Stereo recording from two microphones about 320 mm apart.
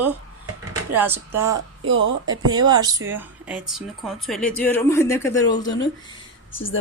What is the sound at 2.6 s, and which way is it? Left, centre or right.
Speech, centre.